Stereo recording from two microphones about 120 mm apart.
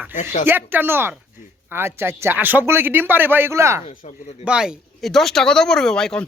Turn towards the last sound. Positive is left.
turn(degrees=5)  # may be behind; listen again after turning